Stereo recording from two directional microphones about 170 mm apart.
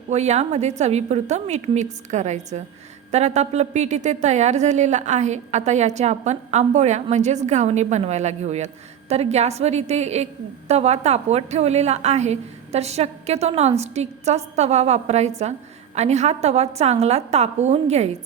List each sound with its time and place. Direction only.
0.1 s a woman's voice: 40° right (ahead or behind)